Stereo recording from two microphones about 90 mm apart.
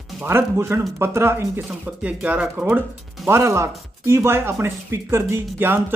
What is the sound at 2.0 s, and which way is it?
Speech, 15° right (ahead or behind).